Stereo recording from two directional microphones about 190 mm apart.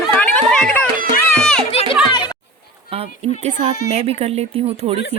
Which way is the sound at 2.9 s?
35° right (ahead or behind).